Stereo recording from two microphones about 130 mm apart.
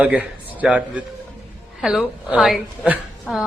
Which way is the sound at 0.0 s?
10° right (ahead or behind).